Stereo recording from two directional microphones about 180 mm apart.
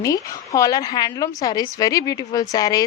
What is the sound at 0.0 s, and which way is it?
A woman's voice, 20° left (ahead or behind).